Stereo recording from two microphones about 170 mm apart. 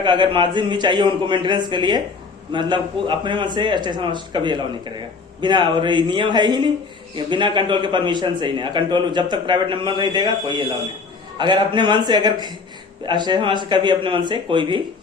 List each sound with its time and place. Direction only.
0.0 s a man's voice: 30° right (ahead or behind)